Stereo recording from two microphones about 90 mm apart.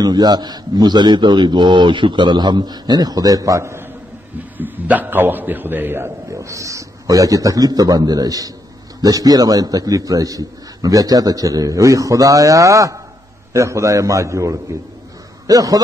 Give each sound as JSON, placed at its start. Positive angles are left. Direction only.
{"t": 0.0, "sound": "a man's voice", "side_deg": -50}
{"t": 4.6, "sound": "a man's voice", "side_deg": -20}
{"t": 6.3, "sound": "a man's voice", "side_deg": -35}